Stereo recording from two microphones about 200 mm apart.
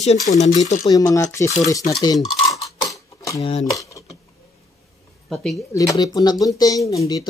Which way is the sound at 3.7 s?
15° left (ahead or behind).